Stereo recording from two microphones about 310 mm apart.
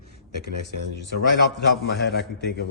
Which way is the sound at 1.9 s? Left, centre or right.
Left.